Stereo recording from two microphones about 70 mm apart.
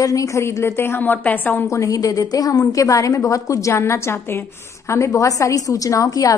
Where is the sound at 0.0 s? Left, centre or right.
Left.